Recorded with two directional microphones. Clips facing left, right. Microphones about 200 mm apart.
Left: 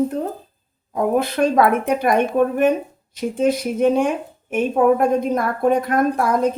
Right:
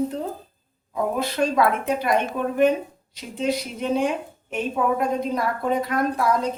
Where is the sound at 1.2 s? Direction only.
55° left (ahead or behind).